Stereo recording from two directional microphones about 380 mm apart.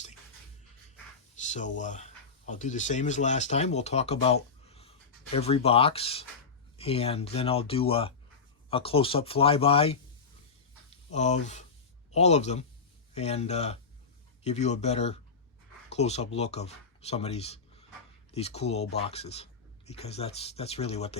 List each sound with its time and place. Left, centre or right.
1.4 s speech: centre
11.1 s speech: centre